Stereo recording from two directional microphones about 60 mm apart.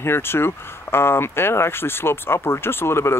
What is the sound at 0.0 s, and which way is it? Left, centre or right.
Speech, left.